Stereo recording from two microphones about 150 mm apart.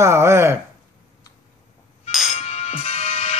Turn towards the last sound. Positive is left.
turn(degrees=45)  # may be behind; listen again after turning